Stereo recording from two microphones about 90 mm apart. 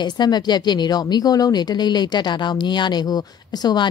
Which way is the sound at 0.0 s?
50° left (ahead or behind).